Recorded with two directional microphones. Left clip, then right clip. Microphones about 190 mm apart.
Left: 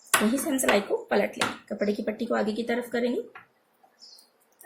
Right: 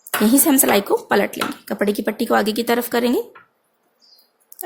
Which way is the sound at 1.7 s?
55° right (ahead or behind).